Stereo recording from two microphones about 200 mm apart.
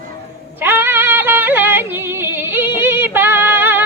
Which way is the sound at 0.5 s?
10° right (ahead or behind).